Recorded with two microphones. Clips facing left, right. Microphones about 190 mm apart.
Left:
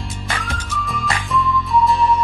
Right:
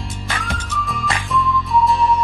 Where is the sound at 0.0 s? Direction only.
5° left (ahead or behind).